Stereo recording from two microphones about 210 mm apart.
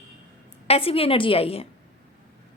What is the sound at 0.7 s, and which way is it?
Speech, 25° left (ahead or behind).